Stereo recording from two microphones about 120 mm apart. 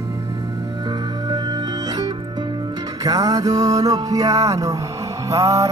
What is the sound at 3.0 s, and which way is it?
Music, 30° right (ahead or behind).